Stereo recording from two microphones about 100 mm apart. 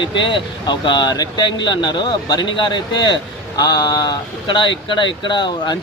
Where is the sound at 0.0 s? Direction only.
55° left (ahead or behind).